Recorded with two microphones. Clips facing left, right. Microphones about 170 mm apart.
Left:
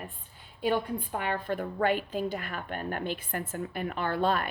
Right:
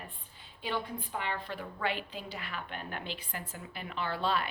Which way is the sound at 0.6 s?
50° left (ahead or behind).